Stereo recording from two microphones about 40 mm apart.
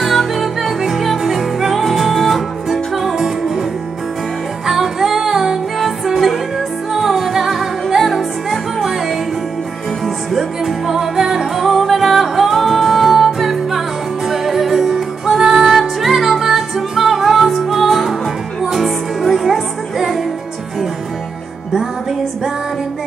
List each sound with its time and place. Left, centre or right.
0.0 s music: centre
4.6 s music: centre
10.0 s music: centre